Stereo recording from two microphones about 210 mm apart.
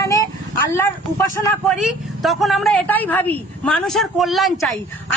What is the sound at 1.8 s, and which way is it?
A woman's voice, centre (ahead or behind).